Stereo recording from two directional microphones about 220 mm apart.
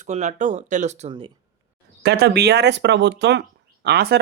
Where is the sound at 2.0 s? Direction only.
50° right (ahead or behind).